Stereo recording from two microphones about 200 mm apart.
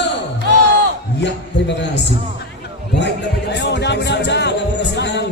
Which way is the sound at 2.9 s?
60° left (ahead or behind).